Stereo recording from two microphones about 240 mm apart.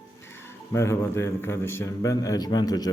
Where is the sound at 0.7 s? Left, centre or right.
Centre.